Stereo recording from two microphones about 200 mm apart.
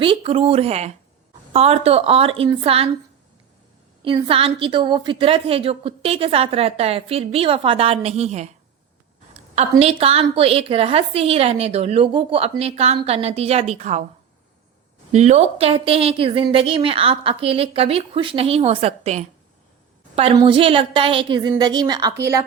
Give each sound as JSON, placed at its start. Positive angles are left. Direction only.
{"t": 0.0, "sound": "a woman's voice", "side_deg": -25}
{"t": 4.0, "sound": "a woman's voice", "side_deg": -25}
{"t": 9.6, "sound": "a woman's voice", "side_deg": -30}
{"t": 15.1, "sound": "a woman's voice", "side_deg": -35}